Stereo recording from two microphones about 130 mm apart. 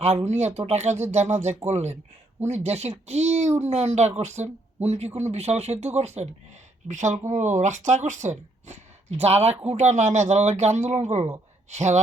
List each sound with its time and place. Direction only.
0.3 s speech: 60° right (ahead or behind)